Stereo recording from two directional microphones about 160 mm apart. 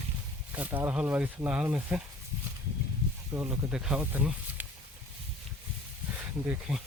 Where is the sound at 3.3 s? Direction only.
15° right (ahead or behind).